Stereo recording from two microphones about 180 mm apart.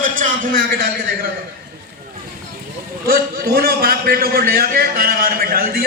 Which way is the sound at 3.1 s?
60° right (ahead or behind).